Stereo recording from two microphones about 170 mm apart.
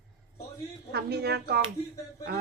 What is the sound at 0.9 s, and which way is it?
Speech, 70° right (ahead or behind).